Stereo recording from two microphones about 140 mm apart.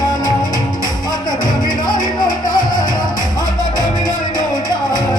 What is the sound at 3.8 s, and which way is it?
Music, 30° left (ahead or behind).